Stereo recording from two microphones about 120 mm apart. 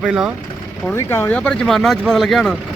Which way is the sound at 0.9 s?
20° left (ahead or behind).